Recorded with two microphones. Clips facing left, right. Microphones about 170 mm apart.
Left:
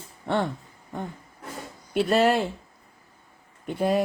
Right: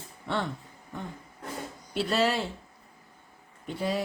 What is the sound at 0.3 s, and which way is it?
Speech, 50° left (ahead or behind).